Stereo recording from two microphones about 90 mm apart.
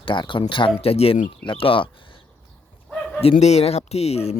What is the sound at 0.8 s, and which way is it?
Speech, 90° left.